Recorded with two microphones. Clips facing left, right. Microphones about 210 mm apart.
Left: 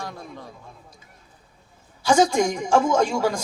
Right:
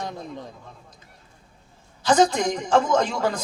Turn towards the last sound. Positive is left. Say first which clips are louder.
# left 1 dB
turn(degrees=10)  # may be behind; listen again after turning